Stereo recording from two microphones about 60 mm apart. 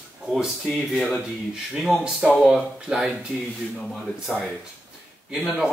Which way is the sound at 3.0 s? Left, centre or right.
Centre.